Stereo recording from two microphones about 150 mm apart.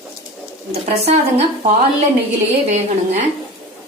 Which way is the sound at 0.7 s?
45° right (ahead or behind).